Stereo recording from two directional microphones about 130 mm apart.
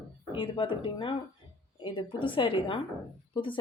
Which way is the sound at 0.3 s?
40° left (ahead or behind).